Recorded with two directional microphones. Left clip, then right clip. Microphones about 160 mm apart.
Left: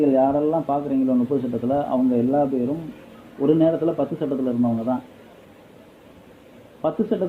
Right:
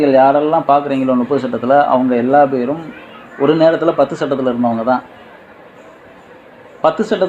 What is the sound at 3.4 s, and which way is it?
Speech, 15° right (ahead or behind).